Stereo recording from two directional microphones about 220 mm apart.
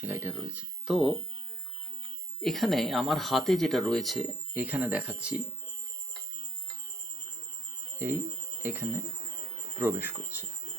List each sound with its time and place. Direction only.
0.0 s speech: 10° right (ahead or behind)
2.4 s speech: centre (ahead or behind)
7.9 s speech: 10° right (ahead or behind)
9.7 s cricket: 10° right (ahead or behind)